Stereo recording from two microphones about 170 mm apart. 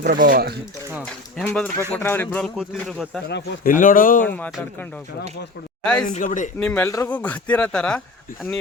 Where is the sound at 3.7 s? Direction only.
50° left (ahead or behind).